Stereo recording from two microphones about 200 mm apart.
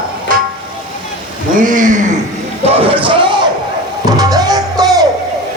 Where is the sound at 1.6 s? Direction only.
40° right (ahead or behind); by 3.3 s 25° right (ahead or behind).